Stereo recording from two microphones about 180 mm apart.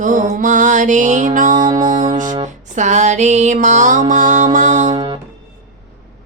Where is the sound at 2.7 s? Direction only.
40° right (ahead or behind).